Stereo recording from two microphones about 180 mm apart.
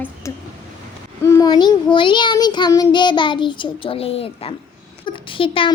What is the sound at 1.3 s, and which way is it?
Child singing, 20° left (ahead or behind).